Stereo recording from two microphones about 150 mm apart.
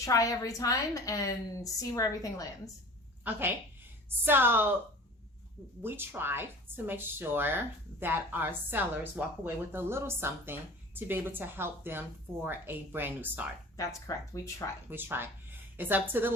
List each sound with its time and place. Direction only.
0.0 s a woman's voice: 20° left (ahead or behind)
3.2 s speech: 10° right (ahead or behind)
5.8 s speech: 15° right (ahead or behind)
14.1 s a woman's voice: 25° left (ahead or behind)
14.8 s speech: 15° right (ahead or behind)